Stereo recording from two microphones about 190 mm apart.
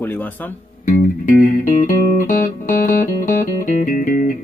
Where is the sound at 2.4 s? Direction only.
45° left (ahead or behind).